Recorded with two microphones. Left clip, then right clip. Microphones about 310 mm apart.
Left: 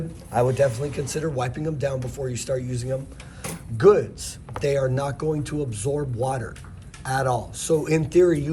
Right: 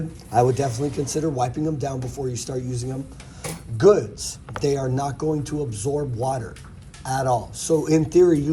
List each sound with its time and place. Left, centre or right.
0.3 s speech: right